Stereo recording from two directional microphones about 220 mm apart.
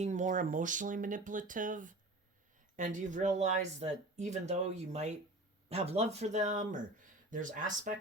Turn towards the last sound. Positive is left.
turn(degrees=-35)  # may be behind; listen again after turning